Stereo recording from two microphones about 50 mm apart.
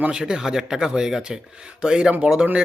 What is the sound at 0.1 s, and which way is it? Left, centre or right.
Speech, centre.